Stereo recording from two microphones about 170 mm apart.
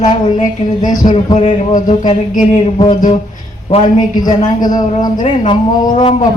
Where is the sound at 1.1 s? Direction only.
40° left (ahead or behind).